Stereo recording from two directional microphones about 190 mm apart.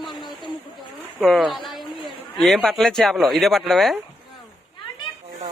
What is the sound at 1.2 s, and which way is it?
A woman's voice, centre (ahead or behind).